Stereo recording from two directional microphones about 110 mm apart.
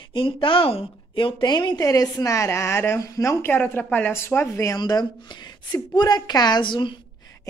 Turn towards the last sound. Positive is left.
turn(degrees=50)  # may be behind; listen again after turning